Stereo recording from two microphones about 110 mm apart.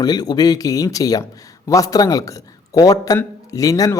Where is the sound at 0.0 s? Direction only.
35° left (ahead or behind).